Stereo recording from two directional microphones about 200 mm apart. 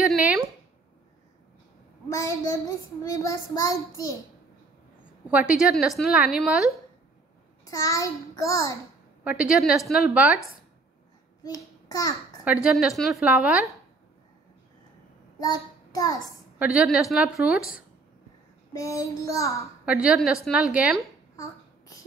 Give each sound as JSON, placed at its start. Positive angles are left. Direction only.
{"t": 0.0, "sound": "a sound", "side_deg": -5}
{"t": 2.0, "sound": "a child's voice", "side_deg": 15}
{"t": 5.3, "sound": "a woman's voice", "side_deg": -5}
{"t": 7.6, "sound": "a child's voice", "side_deg": 15}
{"t": 9.2, "sound": "a woman's voice", "side_deg": -5}
{"t": 11.4, "sound": "a child's voice", "side_deg": 15}
{"t": 12.6, "sound": "a woman's voice", "side_deg": 0}
{"t": 15.3, "sound": "child singing", "side_deg": 20}
{"t": 16.5, "sound": "a woman's voice", "side_deg": -5}
{"t": 18.7, "sound": "a child's voice", "side_deg": 15}
{"t": 19.8, "sound": "a woman's voice", "side_deg": -5}